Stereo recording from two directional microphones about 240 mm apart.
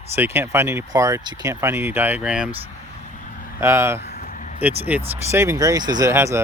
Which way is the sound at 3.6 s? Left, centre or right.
Centre.